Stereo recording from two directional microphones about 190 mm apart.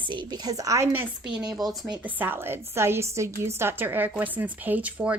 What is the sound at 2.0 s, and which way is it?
A woman's voice, 10° right (ahead or behind).